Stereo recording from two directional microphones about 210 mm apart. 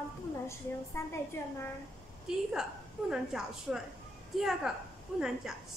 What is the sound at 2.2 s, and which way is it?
A woman's voice, 5° right (ahead or behind).